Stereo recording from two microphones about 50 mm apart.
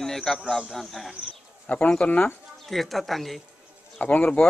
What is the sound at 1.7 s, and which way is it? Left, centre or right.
Speech, left.